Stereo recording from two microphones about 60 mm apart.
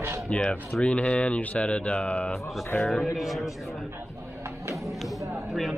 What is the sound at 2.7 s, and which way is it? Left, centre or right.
Speech, left.